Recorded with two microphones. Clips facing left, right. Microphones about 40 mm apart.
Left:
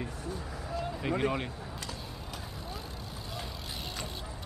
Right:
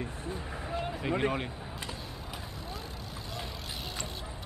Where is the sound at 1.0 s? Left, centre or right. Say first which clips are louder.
Even; centre.